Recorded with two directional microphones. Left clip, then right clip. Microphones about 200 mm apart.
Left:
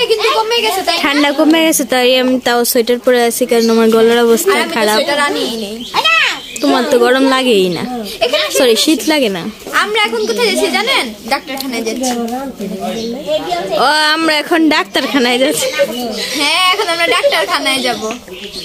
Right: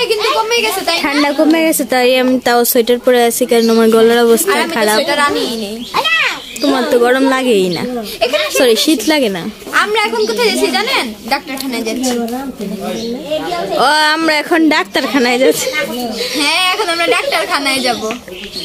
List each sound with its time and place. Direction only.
0.4 s a woman's voice: 5° right (ahead or behind)
1.2 s a woman's voice: 15° left (ahead or behind)
5.9 s a sound: 25° left (ahead or behind)
6.6 s a woman's voice: 15° left (ahead or behind)
13.7 s a woman's voice: 5° left (ahead or behind)
16.3 s a woman's voice: 15° left (ahead or behind)